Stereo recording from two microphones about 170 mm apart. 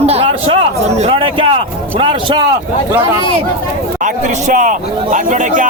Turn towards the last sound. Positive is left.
turn(degrees=-50)  # may be behind; listen again after turning